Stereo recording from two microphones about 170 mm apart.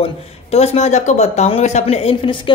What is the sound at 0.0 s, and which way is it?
Speech, 40° left (ahead or behind).